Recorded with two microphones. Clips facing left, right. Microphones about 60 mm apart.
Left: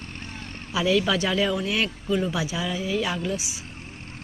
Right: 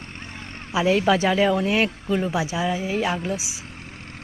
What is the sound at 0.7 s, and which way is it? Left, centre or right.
Speech, right.